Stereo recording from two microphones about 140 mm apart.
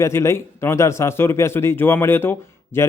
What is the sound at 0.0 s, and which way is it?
A man's voice, 20° left (ahead or behind).